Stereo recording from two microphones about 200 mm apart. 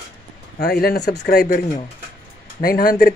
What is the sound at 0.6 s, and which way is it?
Speech, 50° left (ahead or behind).